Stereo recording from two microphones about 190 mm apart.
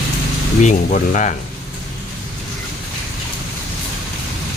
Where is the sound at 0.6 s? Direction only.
40° left (ahead or behind).